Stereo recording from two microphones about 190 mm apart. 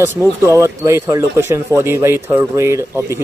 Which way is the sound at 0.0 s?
10° right (ahead or behind).